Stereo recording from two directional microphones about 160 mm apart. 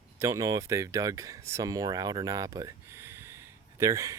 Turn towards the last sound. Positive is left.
turn(degrees=-20)  # may be behind; listen again after turning